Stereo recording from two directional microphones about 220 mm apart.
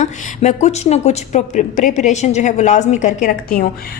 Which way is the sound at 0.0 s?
30° left (ahead or behind).